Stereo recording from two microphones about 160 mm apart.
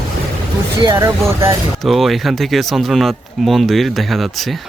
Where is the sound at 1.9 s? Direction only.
Centre (ahead or behind).